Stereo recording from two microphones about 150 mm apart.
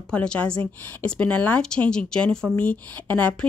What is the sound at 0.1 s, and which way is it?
Speech, 5° left (ahead or behind).